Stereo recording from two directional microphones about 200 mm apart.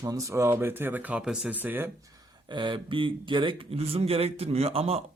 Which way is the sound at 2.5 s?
25° right (ahead or behind).